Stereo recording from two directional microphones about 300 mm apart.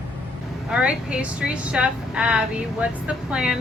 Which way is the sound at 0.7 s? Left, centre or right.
Centre.